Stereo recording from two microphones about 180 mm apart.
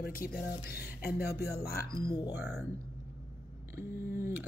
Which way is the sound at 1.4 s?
60° left (ahead or behind).